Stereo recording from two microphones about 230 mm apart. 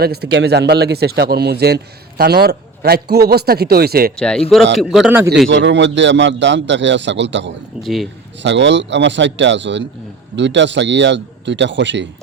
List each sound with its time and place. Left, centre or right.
0.0 s speech: right
4.2 s a man's voice: centre
5.5 s speech: right